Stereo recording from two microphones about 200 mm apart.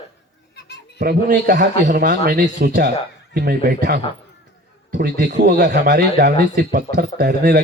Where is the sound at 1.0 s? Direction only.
50° right (ahead or behind).